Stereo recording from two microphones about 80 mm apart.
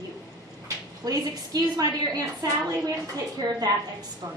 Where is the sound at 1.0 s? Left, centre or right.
Right.